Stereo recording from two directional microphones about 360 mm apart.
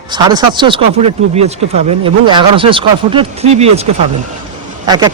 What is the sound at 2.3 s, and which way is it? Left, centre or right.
Speech, centre.